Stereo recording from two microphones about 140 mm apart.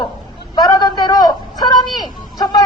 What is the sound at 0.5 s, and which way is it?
A woman's voice, 30° left (ahead or behind).